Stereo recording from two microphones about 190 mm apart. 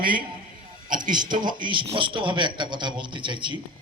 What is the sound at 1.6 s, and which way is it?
Speech, 25° right (ahead or behind).